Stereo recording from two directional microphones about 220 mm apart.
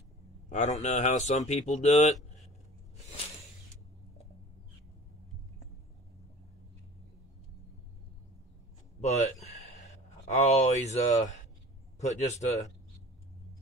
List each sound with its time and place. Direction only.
0.5 s speech: 35° left (ahead or behind)
9.0 s a sound: 30° left (ahead or behind)
10.4 s speech: 30° left (ahead or behind)